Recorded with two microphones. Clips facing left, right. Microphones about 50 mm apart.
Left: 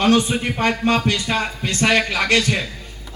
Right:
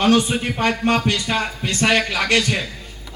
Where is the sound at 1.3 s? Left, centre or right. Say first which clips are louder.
Even; centre.